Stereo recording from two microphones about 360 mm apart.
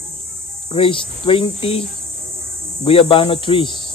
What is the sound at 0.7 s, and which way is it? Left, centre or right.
Speech, centre.